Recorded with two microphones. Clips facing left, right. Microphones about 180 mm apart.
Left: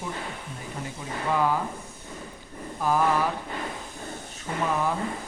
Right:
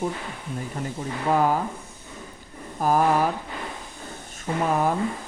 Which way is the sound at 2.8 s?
45° right (ahead or behind).